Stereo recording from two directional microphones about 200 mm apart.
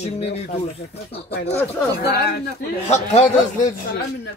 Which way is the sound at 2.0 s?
50° left (ahead or behind).